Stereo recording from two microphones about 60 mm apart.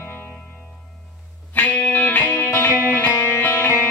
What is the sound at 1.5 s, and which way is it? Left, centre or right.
Music, left.